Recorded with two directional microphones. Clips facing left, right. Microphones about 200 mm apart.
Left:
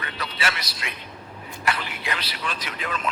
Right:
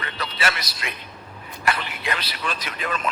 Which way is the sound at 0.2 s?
45° right (ahead or behind).